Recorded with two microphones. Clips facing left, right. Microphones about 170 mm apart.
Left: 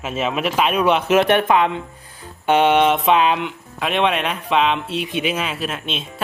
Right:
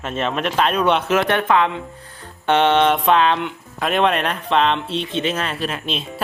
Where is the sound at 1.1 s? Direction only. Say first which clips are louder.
Left 2 dB; 20° left (ahead or behind).